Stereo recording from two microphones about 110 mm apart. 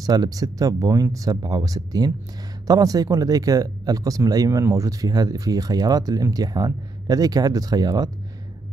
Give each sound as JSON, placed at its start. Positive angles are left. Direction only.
{"t": 0.0, "sound": "speech", "side_deg": -35}